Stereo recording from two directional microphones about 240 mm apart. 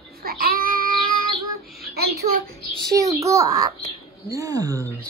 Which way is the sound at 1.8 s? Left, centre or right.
Right.